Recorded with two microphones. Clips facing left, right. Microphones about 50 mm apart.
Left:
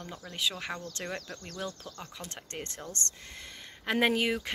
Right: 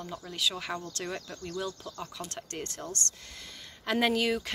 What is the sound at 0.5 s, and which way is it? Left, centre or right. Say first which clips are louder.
Speech: right 2 dB; centre.